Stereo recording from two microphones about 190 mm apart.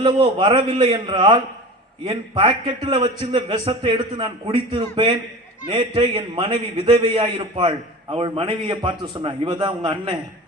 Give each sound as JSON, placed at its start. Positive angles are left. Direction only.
{"t": 0.0, "sound": "a man's voice", "side_deg": -25}